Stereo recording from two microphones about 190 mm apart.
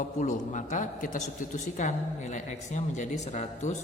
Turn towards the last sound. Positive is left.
turn(degrees=40)  # may be behind; listen again after turning